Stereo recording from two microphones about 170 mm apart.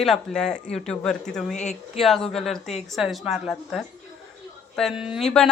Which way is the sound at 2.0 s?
Centre (ahead or behind).